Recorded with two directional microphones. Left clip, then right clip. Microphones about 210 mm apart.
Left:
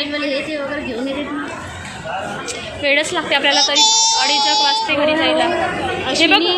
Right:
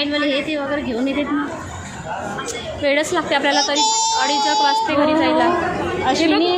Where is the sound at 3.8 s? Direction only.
40° right (ahead or behind).